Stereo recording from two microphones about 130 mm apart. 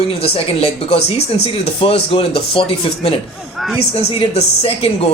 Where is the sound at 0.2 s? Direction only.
50° left (ahead or behind).